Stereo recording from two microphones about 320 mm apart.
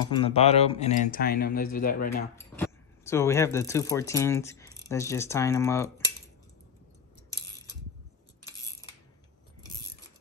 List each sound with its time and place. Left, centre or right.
0.1 s speech: centre
2.3 s speech: centre